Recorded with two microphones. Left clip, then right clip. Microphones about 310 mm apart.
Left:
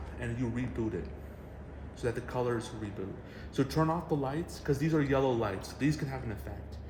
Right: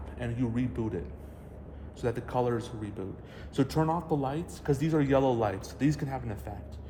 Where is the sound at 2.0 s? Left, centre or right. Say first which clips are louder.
Right 3 dB; right.